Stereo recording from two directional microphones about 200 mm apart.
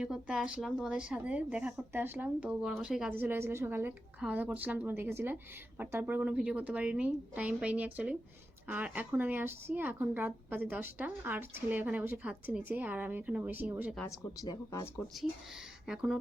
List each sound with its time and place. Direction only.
0.0 s speech: 5° right (ahead or behind)
14.4 s speech: 15° left (ahead or behind)
15.9 s speech: 5° right (ahead or behind)